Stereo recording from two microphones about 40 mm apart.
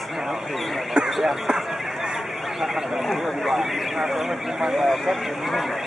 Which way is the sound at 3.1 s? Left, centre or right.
Centre.